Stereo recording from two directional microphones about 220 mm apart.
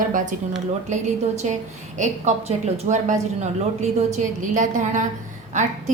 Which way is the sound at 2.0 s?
30° right (ahead or behind).